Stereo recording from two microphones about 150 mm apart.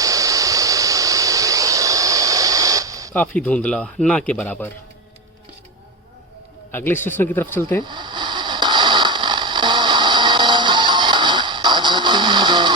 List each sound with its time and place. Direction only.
0.0 s a sound: 20° right (ahead or behind)
3.1 s speech: 10° left (ahead or behind)
6.7 s speech: 15° left (ahead or behind)
7.9 s radio: 30° right (ahead or behind)